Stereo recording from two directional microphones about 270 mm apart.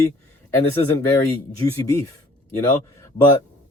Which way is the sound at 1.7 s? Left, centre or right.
Centre.